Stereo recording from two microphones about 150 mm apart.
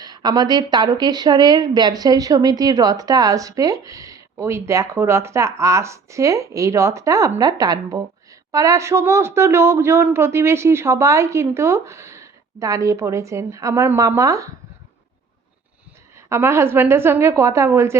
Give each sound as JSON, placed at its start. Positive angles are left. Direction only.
{"t": 0.0, "sound": "a woman's voice", "side_deg": -25}
{"t": 16.1, "sound": "a woman's voice", "side_deg": -20}